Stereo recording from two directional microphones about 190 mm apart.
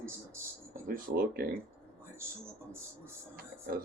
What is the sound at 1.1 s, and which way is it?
Speech, 50° right (ahead or behind).